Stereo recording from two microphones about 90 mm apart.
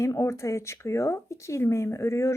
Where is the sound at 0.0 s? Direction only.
35° left (ahead or behind).